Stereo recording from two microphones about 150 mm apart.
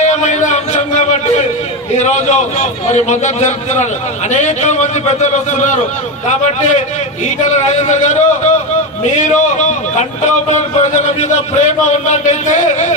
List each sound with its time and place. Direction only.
0.0 s a sound: 50° left (ahead or behind)
2.0 s a man's voice: 50° left (ahead or behind)
7.8 s a man's voice: 50° left (ahead or behind)